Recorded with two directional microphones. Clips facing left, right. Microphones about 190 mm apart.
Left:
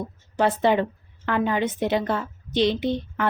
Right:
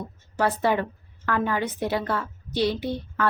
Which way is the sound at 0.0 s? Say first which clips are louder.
Left 3 dB; 20° left (ahead or behind).